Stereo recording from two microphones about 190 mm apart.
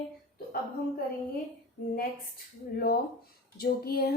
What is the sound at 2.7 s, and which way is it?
A woman's voice, 55° left (ahead or behind).